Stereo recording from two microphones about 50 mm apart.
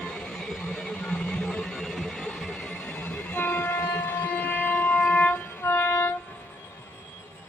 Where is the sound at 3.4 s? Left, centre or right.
Left.